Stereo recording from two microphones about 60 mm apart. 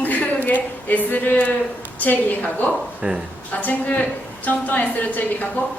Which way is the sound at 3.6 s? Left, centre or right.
Left.